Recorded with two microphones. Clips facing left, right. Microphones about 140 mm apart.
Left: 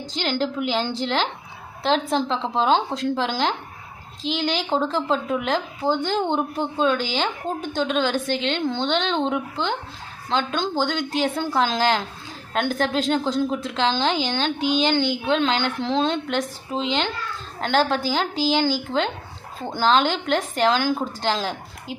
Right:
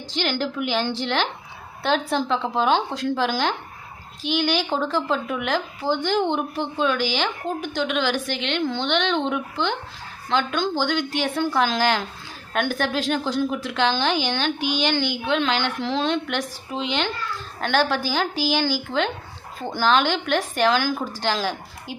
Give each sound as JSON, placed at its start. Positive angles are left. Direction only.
{"t": 0.3, "sound": "a woman's voice", "side_deg": 25}